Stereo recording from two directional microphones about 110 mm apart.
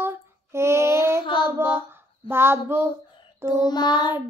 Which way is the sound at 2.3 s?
20° right (ahead or behind).